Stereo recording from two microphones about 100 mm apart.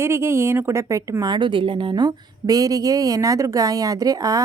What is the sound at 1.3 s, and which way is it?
A woman's voice, 55° right (ahead or behind).